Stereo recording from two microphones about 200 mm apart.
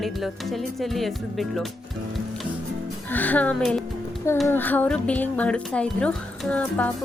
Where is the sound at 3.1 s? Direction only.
10° left (ahead or behind).